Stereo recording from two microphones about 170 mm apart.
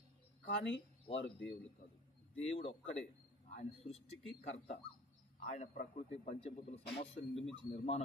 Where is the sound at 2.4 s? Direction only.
35° left (ahead or behind).